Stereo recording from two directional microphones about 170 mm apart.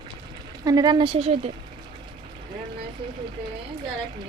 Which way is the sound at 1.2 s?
40° right (ahead or behind).